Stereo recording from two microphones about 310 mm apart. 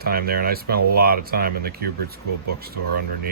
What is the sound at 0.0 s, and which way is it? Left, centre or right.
Speech, right.